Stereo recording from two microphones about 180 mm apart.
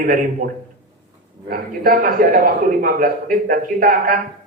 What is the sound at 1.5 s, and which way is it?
A man's voice, 55° right (ahead or behind).